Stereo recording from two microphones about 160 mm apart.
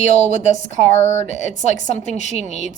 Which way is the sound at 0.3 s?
45° left (ahead or behind).